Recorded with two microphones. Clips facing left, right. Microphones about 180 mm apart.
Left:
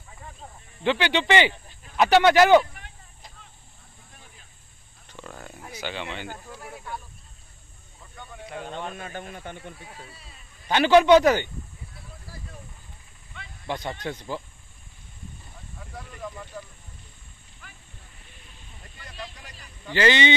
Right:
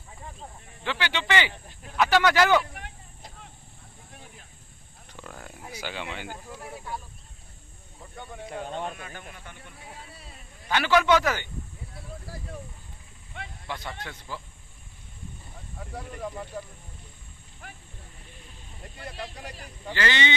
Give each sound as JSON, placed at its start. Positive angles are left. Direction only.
{"t": 0.8, "sound": "speech", "side_deg": 20}
{"t": 2.7, "sound": "vehicle", "side_deg": -65}
{"t": 5.1, "sound": "a sound", "side_deg": -5}
{"t": 5.6, "sound": "speech", "side_deg": -10}
{"t": 8.9, "sound": "speech", "side_deg": 30}
{"t": 10.7, "sound": "speech", "side_deg": 20}
{"t": 13.7, "sound": "speech", "side_deg": 20}
{"t": 18.9, "sound": "speech", "side_deg": -60}
{"t": 19.9, "sound": "speech", "side_deg": 20}